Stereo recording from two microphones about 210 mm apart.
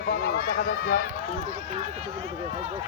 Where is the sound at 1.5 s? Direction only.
35° right (ahead or behind).